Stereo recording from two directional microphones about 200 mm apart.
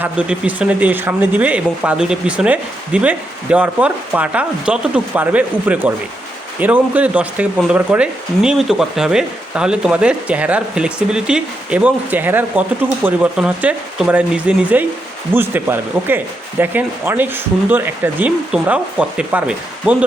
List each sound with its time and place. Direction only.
0.0 s speech: 5° right (ahead or behind)